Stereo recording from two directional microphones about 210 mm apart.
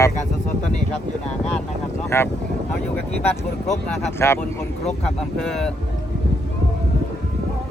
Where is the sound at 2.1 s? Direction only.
15° left (ahead or behind).